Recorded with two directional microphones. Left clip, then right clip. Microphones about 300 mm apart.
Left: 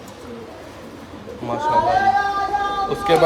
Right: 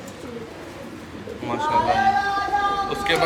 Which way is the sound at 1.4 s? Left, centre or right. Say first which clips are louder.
Left 2 dB; centre.